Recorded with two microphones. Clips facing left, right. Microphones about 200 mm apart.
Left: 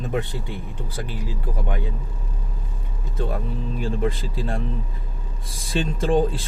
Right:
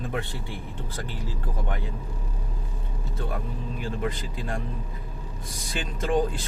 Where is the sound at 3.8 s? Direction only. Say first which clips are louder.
Left 5 dB; 25° left (ahead or behind).